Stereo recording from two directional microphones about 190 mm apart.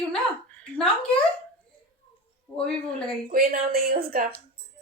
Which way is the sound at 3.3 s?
50° right (ahead or behind).